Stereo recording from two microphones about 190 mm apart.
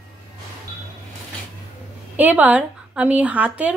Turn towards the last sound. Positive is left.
turn(degrees=-5)  # may be behind; listen again after turning